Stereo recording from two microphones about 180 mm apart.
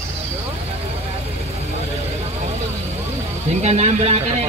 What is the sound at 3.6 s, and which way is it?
Speech, 40° right (ahead or behind).